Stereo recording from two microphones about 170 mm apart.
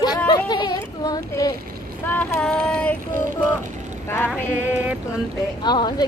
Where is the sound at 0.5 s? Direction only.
25° left (ahead or behind).